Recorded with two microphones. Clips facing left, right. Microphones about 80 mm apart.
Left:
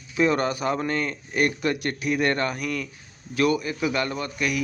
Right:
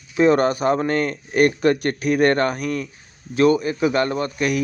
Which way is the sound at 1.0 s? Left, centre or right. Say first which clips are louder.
Right 7 dB; right.